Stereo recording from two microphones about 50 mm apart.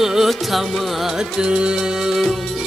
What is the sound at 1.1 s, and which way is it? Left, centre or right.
Music, centre.